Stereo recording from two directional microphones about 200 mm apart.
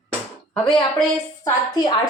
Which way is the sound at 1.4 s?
20° left (ahead or behind).